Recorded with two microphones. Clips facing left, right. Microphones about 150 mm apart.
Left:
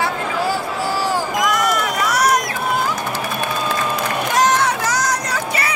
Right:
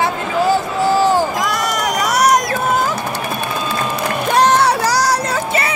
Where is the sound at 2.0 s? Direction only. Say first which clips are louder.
Right 4 dB; 25° right (ahead or behind).